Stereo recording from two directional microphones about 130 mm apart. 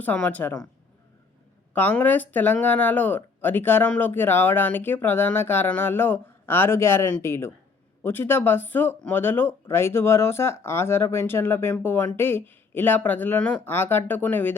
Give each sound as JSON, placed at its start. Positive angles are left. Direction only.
{"t": 0.0, "sound": "speech", "side_deg": 10}
{"t": 1.7, "sound": "speech", "side_deg": 15}